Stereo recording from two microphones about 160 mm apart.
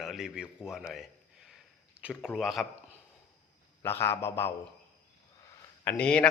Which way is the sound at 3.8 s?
15° left (ahead or behind).